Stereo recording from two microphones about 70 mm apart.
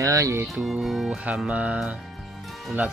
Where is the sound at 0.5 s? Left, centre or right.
Centre.